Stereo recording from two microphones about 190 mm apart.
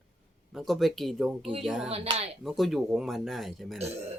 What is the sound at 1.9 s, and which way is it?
Speech, 30° right (ahead or behind).